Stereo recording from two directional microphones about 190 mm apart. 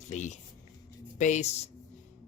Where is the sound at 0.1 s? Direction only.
40° left (ahead or behind).